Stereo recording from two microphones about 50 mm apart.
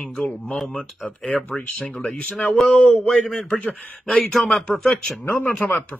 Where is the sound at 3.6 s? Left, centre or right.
Left.